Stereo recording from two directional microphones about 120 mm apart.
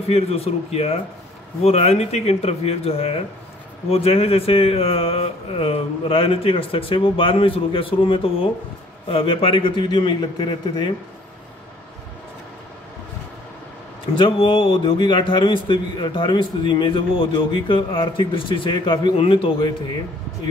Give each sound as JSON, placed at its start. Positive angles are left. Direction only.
{"t": 0.1, "sound": "a man's voice", "side_deg": 55}
{"t": 14.1, "sound": "a man's voice", "side_deg": 45}